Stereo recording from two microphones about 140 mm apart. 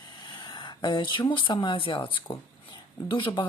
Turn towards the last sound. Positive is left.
turn(degrees=35)  # may be behind; listen again after turning